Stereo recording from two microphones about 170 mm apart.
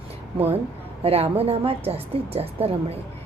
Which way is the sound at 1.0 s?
35° right (ahead or behind).